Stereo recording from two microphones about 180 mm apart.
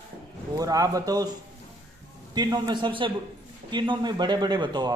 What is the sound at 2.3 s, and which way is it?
Speech, 20° right (ahead or behind).